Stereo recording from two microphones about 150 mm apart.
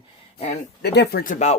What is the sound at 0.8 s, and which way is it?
Speech, 90° left.